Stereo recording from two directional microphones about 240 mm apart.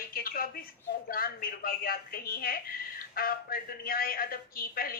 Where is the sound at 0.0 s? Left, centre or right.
Left.